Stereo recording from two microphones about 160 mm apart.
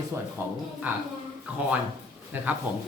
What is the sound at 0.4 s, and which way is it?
Speech, 10° right (ahead or behind).